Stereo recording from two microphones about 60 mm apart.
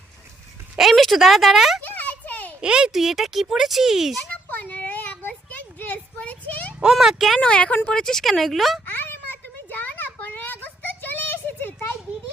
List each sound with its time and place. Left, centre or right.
0.8 s a child's voice: centre
1.8 s a sound: left
2.6 s a child's voice: centre
4.4 s a sound: left
7.0 s speech: centre
7.3 s a child's voice: centre
8.9 s children playing: left